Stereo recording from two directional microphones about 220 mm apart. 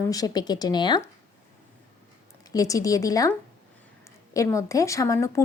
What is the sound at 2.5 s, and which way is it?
Speech, 15° left (ahead or behind).